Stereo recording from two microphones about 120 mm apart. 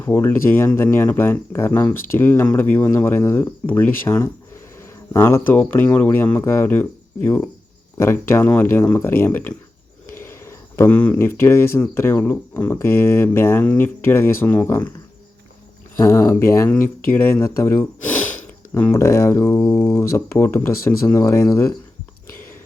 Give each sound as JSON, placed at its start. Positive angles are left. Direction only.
{"t": 0.0, "sound": "speech", "side_deg": 20}
{"t": 16.0, "sound": "speech", "side_deg": 20}